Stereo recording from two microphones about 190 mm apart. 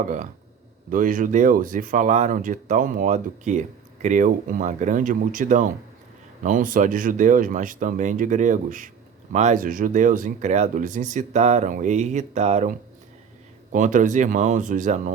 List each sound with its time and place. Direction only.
0.0 s speech: 40° right (ahead or behind)
13.7 s speech: 40° right (ahead or behind)